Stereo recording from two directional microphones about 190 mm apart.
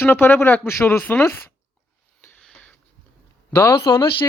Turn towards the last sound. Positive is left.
turn(degrees=20)  # may be behind; listen again after turning